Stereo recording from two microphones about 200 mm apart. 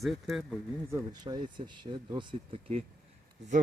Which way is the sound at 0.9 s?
20° right (ahead or behind).